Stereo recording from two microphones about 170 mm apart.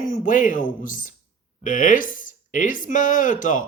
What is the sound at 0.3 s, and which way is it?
Speech, 50° left (ahead or behind).